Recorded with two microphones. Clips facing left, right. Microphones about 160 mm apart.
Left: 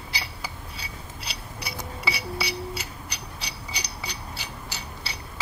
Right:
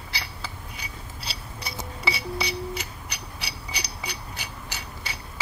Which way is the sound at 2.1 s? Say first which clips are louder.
Right 2 dB; 25° right (ahead or behind).